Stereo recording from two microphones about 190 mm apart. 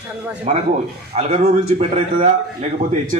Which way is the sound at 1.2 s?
35° right (ahead or behind).